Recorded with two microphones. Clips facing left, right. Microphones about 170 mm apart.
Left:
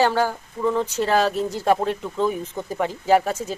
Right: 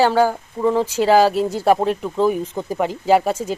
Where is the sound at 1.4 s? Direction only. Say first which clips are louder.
Right 4 dB; 10° right (ahead or behind).